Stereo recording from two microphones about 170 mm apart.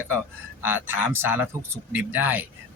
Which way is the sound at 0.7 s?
10° right (ahead or behind).